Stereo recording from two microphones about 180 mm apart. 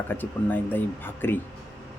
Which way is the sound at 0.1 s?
10° left (ahead or behind).